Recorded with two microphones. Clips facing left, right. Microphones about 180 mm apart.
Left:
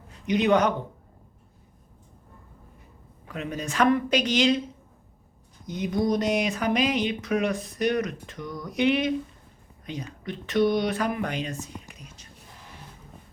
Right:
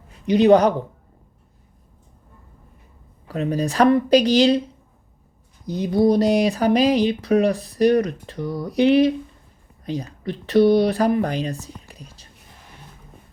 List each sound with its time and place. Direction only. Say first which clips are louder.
0.3 s speech: right 7 dB; 35° right (ahead or behind)
3.2 s speech: right 9 dB; 35° right (ahead or behind)
5.6 s speech: right 8 dB; 35° right (ahead or behind)